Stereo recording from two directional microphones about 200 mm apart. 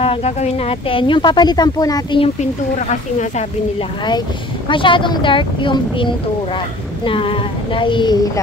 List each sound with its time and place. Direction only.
0.0 s speech: 30° left (ahead or behind)
2.9 s speech: 35° left (ahead or behind)
4.6 s speech: 25° left (ahead or behind)
7.1 s speech: 25° left (ahead or behind)